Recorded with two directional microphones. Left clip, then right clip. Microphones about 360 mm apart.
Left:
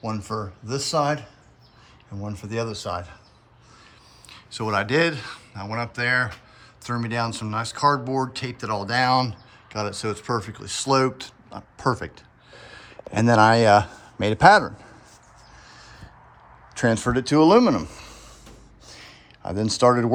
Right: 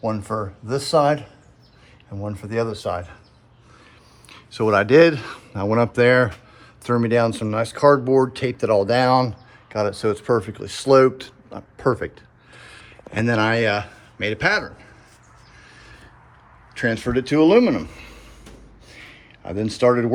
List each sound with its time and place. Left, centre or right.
0.0 s speech: centre
4.3 s a man's voice: centre
15.7 s a sound: centre
16.7 s speech: centre
17.1 s speech: left
17.3 s speech: centre
18.9 s a sound: centre
19.5 s speech: centre